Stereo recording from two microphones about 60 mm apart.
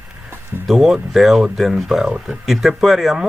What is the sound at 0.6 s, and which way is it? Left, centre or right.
Speech, centre.